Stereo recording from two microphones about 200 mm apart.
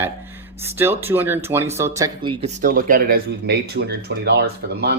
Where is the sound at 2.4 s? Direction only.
40° right (ahead or behind).